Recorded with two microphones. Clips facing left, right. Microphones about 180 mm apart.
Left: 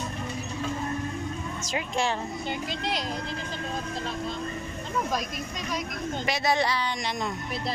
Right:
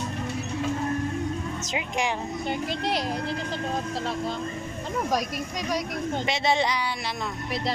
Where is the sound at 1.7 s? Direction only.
15° right (ahead or behind).